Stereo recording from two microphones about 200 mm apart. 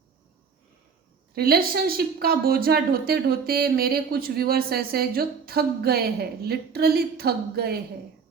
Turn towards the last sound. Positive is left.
turn(degrees=-50)  # may be behind; listen again after turning